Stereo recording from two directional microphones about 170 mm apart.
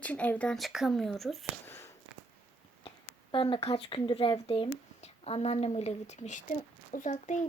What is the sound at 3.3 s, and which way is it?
A woman's voice, 30° left (ahead or behind).